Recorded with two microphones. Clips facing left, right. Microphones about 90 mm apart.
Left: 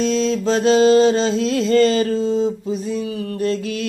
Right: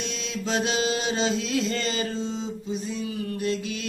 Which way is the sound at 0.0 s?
35° left (ahead or behind).